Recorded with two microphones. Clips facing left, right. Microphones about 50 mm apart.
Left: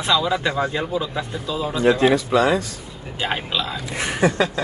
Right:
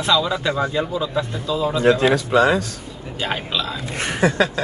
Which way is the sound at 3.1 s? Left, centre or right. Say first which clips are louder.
Even; centre.